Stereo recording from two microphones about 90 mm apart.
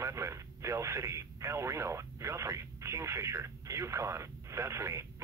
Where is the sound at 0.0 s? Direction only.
35° right (ahead or behind).